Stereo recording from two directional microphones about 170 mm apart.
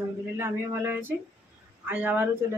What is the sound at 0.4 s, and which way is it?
Speech, 15° right (ahead or behind).